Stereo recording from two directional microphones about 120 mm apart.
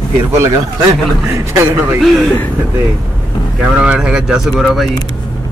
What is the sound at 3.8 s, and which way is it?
Speech, 5° right (ahead or behind).